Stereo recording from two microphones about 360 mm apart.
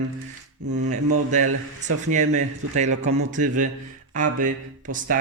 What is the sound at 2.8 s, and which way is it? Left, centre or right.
Speech, centre.